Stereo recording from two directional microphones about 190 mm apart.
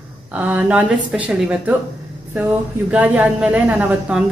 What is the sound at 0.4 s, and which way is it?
A woman's voice, 10° right (ahead or behind).